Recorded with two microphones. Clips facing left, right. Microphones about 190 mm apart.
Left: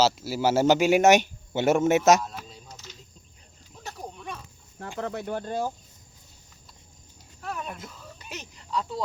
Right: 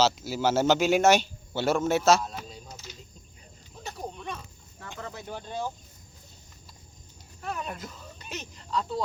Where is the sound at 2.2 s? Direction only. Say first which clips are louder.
Right 1 dB; centre (ahead or behind).